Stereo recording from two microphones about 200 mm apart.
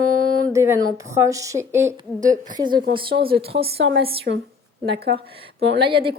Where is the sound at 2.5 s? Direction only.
25° right (ahead or behind).